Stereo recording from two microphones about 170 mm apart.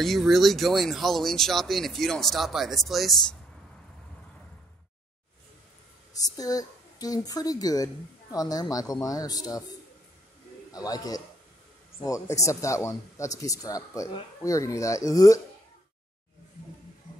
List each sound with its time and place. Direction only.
0.0 s speech: centre (ahead or behind)
6.2 s a woman's voice: 20° left (ahead or behind)
10.7 s a woman's voice: 20° left (ahead or behind)